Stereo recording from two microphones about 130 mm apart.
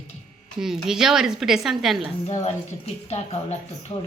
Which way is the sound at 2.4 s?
55° left (ahead or behind).